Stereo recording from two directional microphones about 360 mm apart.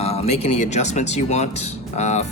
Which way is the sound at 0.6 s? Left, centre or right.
Centre.